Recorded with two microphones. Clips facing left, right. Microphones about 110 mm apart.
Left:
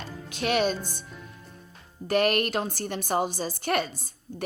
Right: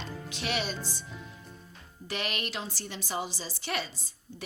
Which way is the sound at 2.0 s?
50° left (ahead or behind).